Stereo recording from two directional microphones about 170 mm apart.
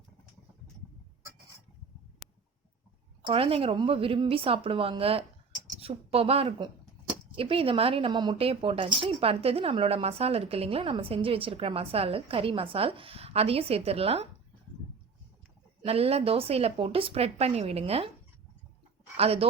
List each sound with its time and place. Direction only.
3.2 s a woman's voice: 35° right (ahead or behind)
15.8 s a woman's voice: 35° right (ahead or behind)
19.1 s a woman's voice: 35° right (ahead or behind)